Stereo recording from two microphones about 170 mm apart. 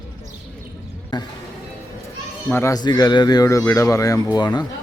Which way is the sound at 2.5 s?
20° left (ahead or behind).